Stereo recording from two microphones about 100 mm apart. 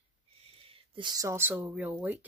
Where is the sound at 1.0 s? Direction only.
45° right (ahead or behind).